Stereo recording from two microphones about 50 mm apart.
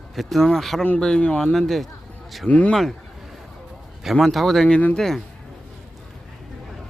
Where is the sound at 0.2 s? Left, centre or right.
Centre.